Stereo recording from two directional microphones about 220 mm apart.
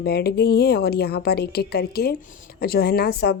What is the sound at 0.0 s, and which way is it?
A woman's voice, 45° left (ahead or behind).